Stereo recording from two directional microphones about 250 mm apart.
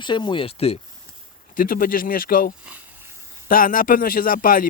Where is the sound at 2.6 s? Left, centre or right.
Centre.